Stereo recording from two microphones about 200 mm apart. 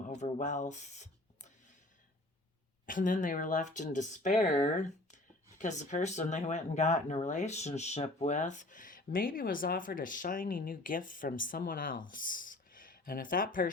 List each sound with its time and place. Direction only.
0.1 s speech: 40° left (ahead or behind)
2.8 s speech: 40° left (ahead or behind)